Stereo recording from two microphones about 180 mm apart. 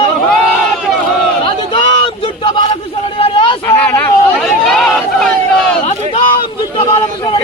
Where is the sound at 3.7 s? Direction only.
10° left (ahead or behind).